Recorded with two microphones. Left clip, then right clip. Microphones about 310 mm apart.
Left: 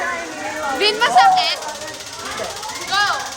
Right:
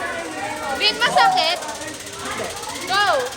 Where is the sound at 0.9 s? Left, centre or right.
Left.